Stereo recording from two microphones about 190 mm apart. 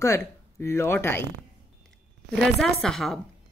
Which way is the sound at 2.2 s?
Centre (ahead or behind).